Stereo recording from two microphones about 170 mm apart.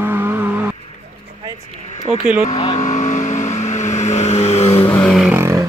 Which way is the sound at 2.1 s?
5° right (ahead or behind).